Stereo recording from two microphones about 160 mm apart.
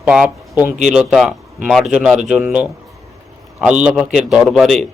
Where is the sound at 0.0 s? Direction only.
5° right (ahead or behind).